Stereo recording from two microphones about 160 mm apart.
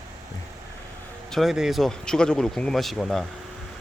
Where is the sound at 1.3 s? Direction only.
Centre (ahead or behind).